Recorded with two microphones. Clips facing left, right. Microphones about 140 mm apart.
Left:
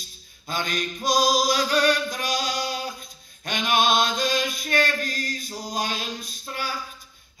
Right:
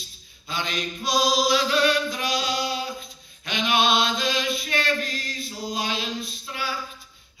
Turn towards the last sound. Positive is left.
turn(degrees=45)  # may be behind; listen again after turning